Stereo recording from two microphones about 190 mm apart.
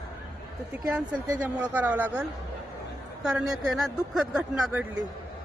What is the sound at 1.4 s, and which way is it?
Speech, 10° right (ahead or behind).